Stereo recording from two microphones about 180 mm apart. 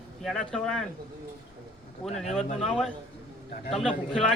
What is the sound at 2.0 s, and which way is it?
Speech, centre (ahead or behind).